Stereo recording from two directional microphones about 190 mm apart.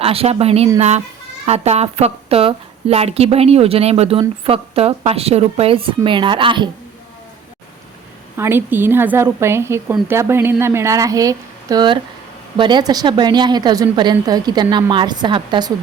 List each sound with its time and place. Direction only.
0.0 s a woman's voice: 30° right (ahead or behind)
8.4 s a woman's voice: 10° right (ahead or behind)